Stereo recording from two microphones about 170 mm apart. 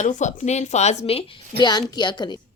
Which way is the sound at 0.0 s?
45° left (ahead or behind).